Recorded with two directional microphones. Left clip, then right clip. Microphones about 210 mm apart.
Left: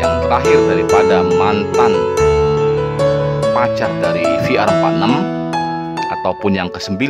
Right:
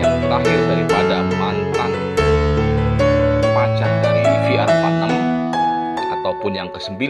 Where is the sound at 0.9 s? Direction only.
25° left (ahead or behind).